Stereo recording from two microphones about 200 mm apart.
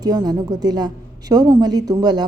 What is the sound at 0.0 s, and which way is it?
A woman's voice, 20° right (ahead or behind).